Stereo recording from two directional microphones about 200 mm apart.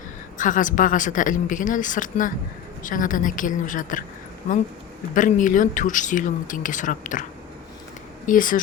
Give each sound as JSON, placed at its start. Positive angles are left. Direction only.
{"t": 0.3, "sound": "speech", "side_deg": 40}
{"t": 5.1, "sound": "speech", "side_deg": 40}
{"t": 8.3, "sound": "speech", "side_deg": 40}